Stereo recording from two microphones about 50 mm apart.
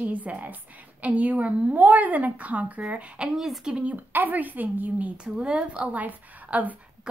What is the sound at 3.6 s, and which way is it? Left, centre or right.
Speech, right.